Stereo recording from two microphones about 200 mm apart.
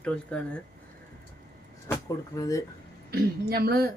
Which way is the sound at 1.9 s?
15° left (ahead or behind).